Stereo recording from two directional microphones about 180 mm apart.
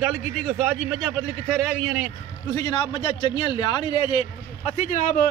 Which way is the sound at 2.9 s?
30° left (ahead or behind).